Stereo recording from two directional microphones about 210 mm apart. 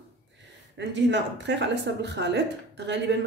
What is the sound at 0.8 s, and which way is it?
Speech, 60° right (ahead or behind).